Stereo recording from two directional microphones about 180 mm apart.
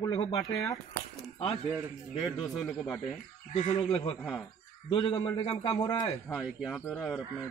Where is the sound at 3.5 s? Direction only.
30° left (ahead or behind).